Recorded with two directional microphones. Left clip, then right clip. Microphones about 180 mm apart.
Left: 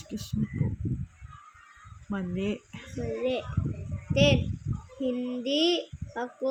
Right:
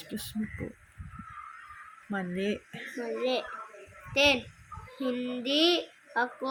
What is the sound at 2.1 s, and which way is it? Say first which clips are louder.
Speech: right 1 dB; 45° left (ahead or behind).